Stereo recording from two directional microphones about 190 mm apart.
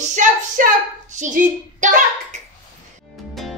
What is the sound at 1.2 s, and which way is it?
Hands, 40° right (ahead or behind).